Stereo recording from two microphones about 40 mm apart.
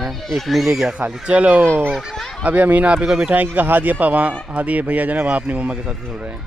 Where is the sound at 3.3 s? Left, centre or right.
Right.